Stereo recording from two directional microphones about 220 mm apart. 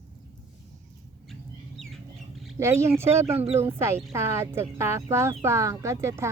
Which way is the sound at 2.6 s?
10° right (ahead or behind).